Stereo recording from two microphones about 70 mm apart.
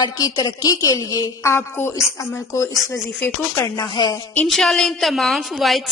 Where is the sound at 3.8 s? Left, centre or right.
Left.